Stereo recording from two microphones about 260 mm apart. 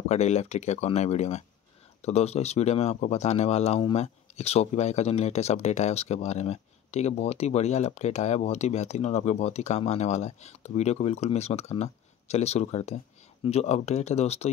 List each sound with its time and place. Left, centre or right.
0.1 s speech: left